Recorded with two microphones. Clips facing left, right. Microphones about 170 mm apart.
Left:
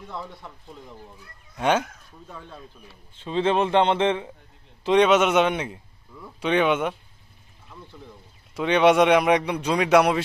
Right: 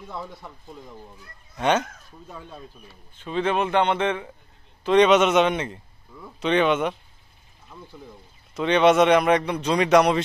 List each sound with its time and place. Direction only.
0.1 s speech: 5° right (ahead or behind)
1.6 s speech: 10° left (ahead or behind)
2.2 s speech: 10° right (ahead or behind)
3.2 s a man's voice: 25° left (ahead or behind)
4.9 s speech: 5° left (ahead or behind)
7.7 s speech: 10° right (ahead or behind)
8.5 s speech: 10° left (ahead or behind)